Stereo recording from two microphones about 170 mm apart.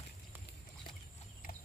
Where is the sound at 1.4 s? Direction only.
55° left (ahead or behind).